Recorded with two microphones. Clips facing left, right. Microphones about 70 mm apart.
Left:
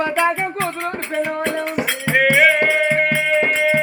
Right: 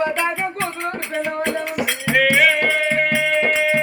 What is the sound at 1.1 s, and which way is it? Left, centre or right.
Speech, centre.